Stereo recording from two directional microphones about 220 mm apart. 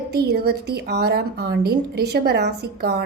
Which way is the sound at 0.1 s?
45° right (ahead or behind).